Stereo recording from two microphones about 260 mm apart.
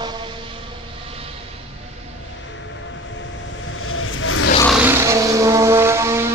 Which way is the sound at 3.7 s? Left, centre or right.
Left.